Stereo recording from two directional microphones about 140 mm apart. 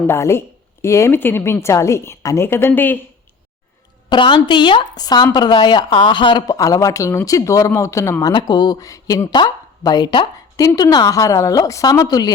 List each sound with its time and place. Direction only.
0.1 s a woman's voice: 20° left (ahead or behind)
4.1 s speech: 35° left (ahead or behind)
8.3 s speech: 30° left (ahead or behind)